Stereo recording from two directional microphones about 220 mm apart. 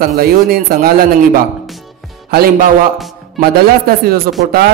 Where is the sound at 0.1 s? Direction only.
45° right (ahead or behind).